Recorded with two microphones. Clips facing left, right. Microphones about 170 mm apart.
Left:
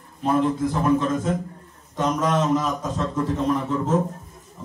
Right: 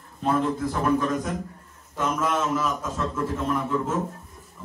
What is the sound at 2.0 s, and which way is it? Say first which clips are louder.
A man's voice: left 3 dB; 40° left (ahead or behind).